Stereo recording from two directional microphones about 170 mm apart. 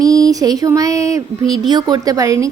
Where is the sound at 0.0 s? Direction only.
20° right (ahead or behind).